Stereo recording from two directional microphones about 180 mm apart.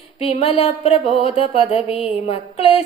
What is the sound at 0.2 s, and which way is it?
Music, 35° left (ahead or behind).